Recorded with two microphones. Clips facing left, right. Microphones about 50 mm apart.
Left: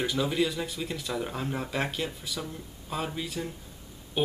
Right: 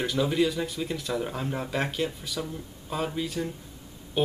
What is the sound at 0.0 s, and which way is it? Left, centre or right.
Speech, centre.